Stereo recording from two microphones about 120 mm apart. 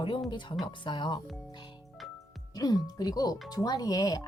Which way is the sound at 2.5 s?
30° left (ahead or behind).